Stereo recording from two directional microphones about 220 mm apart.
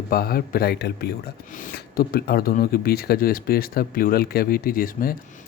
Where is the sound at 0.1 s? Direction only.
40° left (ahead or behind).